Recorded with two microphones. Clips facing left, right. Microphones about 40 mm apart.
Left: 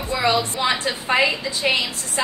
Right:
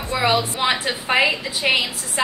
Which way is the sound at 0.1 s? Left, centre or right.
Right.